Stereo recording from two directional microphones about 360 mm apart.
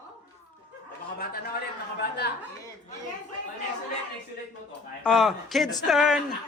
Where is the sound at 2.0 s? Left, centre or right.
Left.